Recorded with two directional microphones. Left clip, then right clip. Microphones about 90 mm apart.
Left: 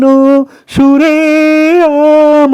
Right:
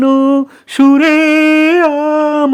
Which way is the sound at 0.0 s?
25° left (ahead or behind).